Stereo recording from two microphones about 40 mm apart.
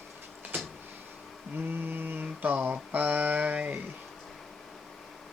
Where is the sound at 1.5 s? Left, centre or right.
Right.